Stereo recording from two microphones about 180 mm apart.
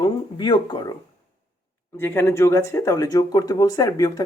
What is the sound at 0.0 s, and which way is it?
Speech, 25° left (ahead or behind).